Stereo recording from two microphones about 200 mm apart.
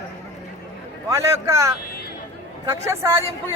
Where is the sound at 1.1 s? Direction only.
15° right (ahead or behind).